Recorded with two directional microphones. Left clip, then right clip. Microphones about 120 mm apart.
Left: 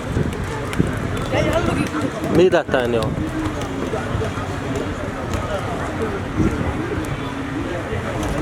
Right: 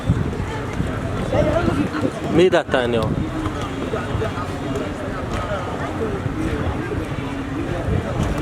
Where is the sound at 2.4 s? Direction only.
10° right (ahead or behind).